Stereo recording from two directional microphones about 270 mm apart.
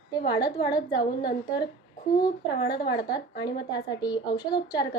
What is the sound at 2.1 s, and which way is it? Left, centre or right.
A woman's voice, centre.